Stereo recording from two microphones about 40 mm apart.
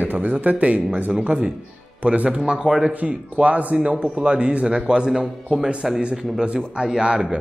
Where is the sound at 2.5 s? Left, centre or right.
Centre.